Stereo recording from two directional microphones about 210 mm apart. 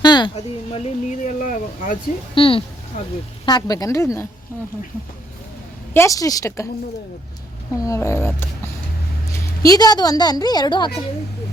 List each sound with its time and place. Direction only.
0.0 s a sound: 20° left (ahead or behind)
0.3 s speech: 35° left (ahead or behind)
2.3 s speech: 25° left (ahead or behind)
5.9 s speech: 15° left (ahead or behind)
7.9 s a woman's voice: 15° left (ahead or behind)